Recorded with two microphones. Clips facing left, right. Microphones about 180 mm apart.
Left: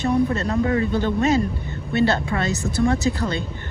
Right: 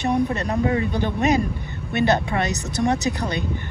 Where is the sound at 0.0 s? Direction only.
15° right (ahead or behind).